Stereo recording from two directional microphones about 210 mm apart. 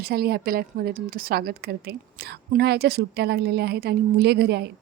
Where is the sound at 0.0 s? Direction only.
50° right (ahead or behind).